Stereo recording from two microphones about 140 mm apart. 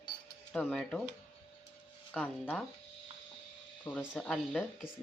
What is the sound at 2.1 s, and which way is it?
Speech, 5° left (ahead or behind).